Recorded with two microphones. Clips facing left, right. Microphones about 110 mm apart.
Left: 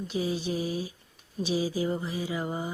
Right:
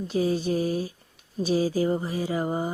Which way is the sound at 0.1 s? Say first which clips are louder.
Right 6 dB; 45° right (ahead or behind).